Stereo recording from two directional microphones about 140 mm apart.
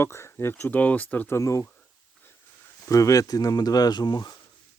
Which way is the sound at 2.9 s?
25° left (ahead or behind).